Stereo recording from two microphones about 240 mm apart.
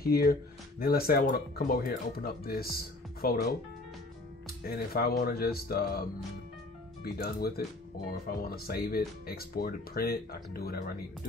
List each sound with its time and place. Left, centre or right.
0.0 s speech: left
4.6 s speech: left